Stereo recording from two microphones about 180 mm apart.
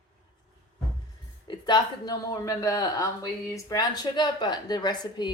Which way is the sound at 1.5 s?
25° left (ahead or behind).